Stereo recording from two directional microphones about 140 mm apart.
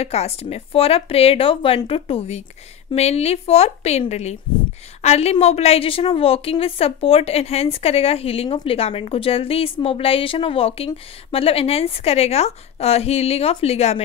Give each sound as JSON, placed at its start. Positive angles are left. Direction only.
{"t": 0.0, "sound": "a woman's voice", "side_deg": 45}